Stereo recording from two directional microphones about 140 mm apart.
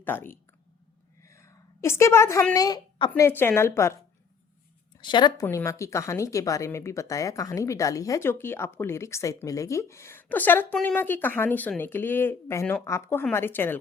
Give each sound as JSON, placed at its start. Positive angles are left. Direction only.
{"t": 0.0, "sound": "a woman's voice", "side_deg": 15}
{"t": 3.2, "sound": "speech", "side_deg": 15}
{"t": 4.9, "sound": "speech", "side_deg": 35}